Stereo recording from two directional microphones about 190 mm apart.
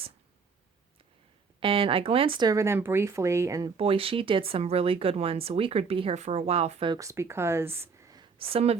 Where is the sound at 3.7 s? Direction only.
30° right (ahead or behind).